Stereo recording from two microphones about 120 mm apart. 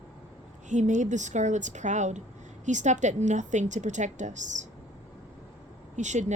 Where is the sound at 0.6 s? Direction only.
90° right.